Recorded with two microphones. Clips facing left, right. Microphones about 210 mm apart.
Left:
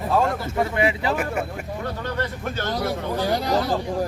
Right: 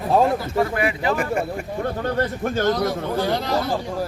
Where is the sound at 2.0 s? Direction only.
45° right (ahead or behind).